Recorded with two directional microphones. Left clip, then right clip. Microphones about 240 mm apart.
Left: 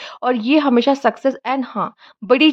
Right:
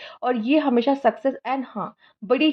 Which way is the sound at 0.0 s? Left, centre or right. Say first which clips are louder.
Left 5 dB; left.